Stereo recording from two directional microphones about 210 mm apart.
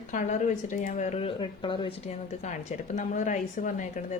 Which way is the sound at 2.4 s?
35° left (ahead or behind).